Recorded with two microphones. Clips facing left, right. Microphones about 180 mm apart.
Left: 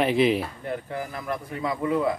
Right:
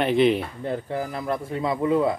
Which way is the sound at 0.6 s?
25° right (ahead or behind).